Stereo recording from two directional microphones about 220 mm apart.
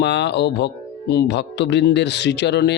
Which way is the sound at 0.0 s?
50° left (ahead or behind).